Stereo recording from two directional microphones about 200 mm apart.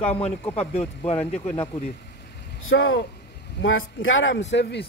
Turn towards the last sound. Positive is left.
turn(degrees=60)  # may be behind; listen again after turning